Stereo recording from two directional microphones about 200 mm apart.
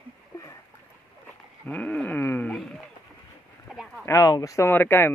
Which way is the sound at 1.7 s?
5° left (ahead or behind).